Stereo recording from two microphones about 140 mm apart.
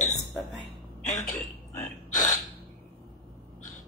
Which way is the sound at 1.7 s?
20° left (ahead or behind).